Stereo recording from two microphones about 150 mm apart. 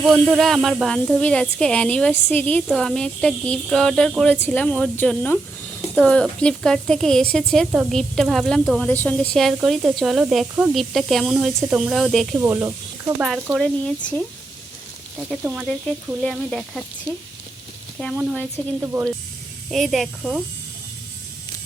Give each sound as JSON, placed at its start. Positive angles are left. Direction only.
{"t": 0.0, "sound": "speech", "side_deg": 0}
{"t": 12.4, "sound": "speech", "side_deg": -15}
{"t": 15.3, "sound": "speech", "side_deg": -10}
{"t": 15.6, "sound": "speech", "side_deg": 5}
{"t": 18.0, "sound": "speech", "side_deg": 10}
{"t": 19.7, "sound": "speech", "side_deg": 0}